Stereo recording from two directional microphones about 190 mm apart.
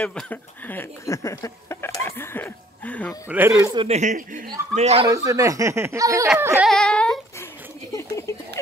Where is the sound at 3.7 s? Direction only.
35° right (ahead or behind).